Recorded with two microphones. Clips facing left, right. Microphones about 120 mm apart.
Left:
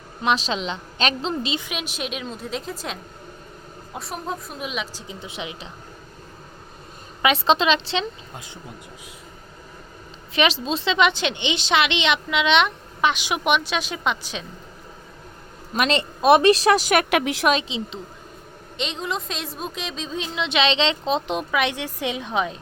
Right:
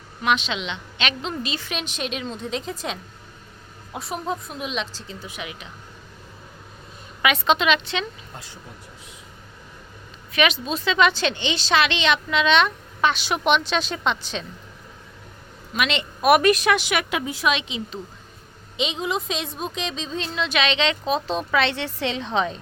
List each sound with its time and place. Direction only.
0.2 s a woman's voice: 35° left (ahead or behind); by 5.3 s 15° left (ahead or behind)
5.3 s a woman's voice: 25° left (ahead or behind)
7.2 s speech: 30° left (ahead or behind)
10.3 s a woman's voice: 30° left (ahead or behind); by 14.4 s 10° left (ahead or behind)
15.7 s speech: 35° left (ahead or behind)
16.2 s speech: 25° left (ahead or behind); by 17.1 s 45° left (ahead or behind)
17.1 s a woman's voice: 80° left
17.4 s a woman's voice: 40° left (ahead or behind)
17.7 s a woman's voice: 25° left (ahead or behind)
18.8 s a woman's voice: 5° right (ahead or behind)